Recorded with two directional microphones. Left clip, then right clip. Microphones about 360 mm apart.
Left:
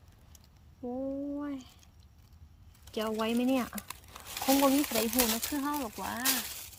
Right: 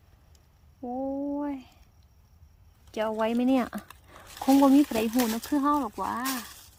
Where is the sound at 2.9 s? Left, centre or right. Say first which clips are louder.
Right 5 dB; centre.